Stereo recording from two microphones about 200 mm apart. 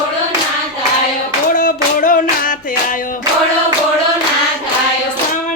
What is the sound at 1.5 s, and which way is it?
Music, 45° left (ahead or behind).